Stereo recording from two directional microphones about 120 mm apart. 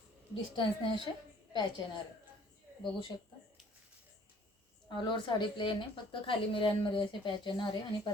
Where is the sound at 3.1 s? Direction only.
30° left (ahead or behind).